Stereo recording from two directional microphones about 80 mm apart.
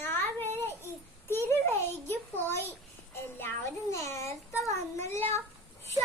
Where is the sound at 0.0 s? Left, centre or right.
Left.